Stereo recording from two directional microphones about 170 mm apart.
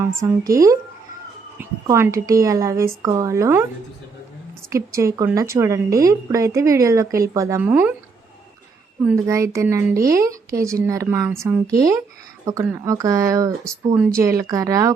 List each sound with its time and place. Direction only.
0.0 s a woman's voice: 15° right (ahead or behind)
4.7 s a woman's voice: 20° right (ahead or behind)
9.0 s a woman's voice: 15° right (ahead or behind)